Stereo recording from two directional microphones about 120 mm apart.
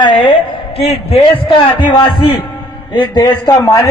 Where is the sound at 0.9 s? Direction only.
50° left (ahead or behind).